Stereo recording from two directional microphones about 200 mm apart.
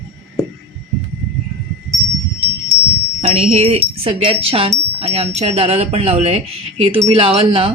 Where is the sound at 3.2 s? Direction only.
30° right (ahead or behind).